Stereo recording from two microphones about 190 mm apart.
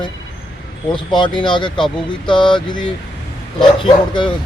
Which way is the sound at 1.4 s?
25° left (ahead or behind).